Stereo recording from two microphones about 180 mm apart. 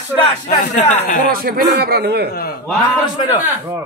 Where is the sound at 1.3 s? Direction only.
55° right (ahead or behind).